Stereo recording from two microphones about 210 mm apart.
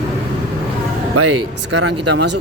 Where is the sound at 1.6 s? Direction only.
55° right (ahead or behind).